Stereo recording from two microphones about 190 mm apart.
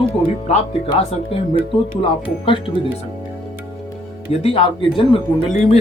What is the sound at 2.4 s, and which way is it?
Speech, 25° left (ahead or behind).